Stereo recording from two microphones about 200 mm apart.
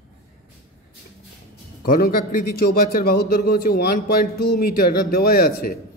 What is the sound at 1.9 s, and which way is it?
Speech, 50° left (ahead or behind).